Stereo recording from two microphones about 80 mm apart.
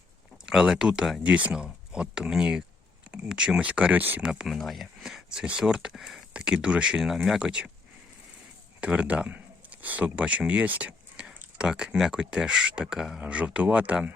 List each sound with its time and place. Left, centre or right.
0.4 s speech: centre
1.2 s speech: centre
4.2 s speech: centre
8.8 s speech: centre